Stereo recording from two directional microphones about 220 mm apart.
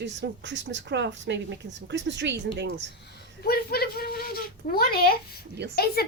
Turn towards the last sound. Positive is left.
turn(degrees=-50)  # may be behind; listen again after turning